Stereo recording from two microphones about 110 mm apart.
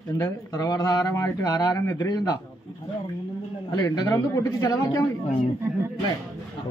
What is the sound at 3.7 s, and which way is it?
A man's voice, 35° left (ahead or behind).